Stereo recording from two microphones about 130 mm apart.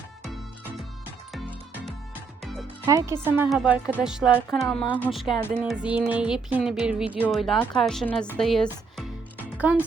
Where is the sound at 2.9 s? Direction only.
20° right (ahead or behind).